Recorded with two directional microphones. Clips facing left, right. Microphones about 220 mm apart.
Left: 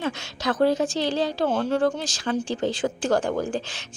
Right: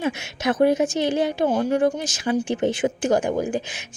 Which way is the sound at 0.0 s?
20° right (ahead or behind).